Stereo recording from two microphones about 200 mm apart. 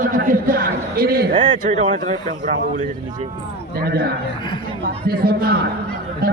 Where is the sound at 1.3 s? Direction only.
25° right (ahead or behind).